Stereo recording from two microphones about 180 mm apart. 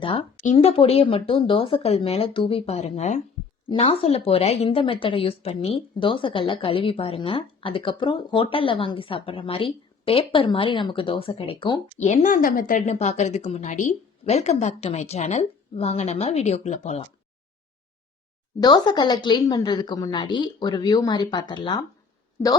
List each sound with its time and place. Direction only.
0.0 s a woman's voice: 30° left (ahead or behind)
11.9 s speech: 40° left (ahead or behind)
18.6 s a woman's voice: 25° left (ahead or behind)